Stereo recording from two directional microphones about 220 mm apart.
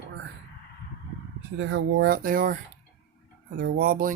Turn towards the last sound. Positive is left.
turn(degrees=-40)  # may be behind; listen again after turning